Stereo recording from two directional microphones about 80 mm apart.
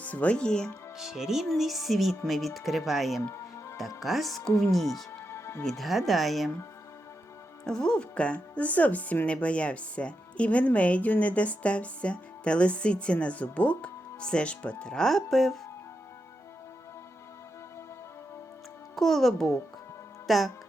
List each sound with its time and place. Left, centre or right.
0.0 s speech: centre
0.9 s speech: centre
5.3 s music: left
5.6 s speech: centre
7.6 s speech: centre
18.9 s speech: centre